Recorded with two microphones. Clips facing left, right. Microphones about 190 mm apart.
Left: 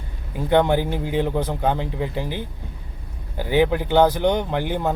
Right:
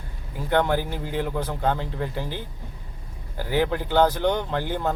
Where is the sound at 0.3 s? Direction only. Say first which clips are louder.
Left 4 dB; 20° left (ahead or behind).